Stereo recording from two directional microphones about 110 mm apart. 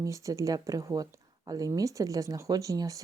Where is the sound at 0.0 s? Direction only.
30° right (ahead or behind).